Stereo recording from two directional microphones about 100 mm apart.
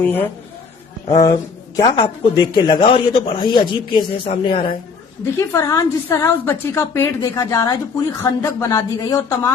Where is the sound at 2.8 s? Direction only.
65° left (ahead or behind).